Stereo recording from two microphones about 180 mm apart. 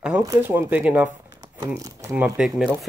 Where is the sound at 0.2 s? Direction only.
15° right (ahead or behind).